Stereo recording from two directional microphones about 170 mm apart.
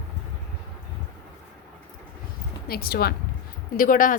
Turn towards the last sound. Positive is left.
turn(degrees=55)  # may be behind; listen again after turning